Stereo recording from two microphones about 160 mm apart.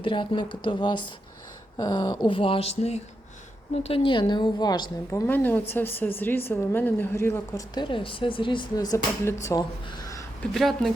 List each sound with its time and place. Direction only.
0.0 s speech: 30° left (ahead or behind)
5.2 s a woman's voice: 10° left (ahead or behind)
7.8 s speech: 30° left (ahead or behind)
10.5 s speech: centre (ahead or behind)